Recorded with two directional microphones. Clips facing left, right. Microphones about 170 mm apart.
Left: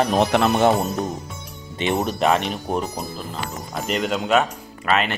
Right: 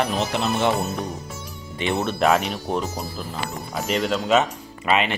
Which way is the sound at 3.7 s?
Centre (ahead or behind).